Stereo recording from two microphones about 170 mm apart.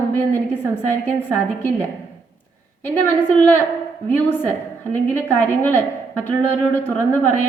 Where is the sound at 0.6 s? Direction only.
10° left (ahead or behind).